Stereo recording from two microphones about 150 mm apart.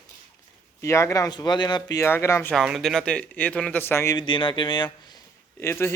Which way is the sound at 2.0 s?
15° left (ahead or behind).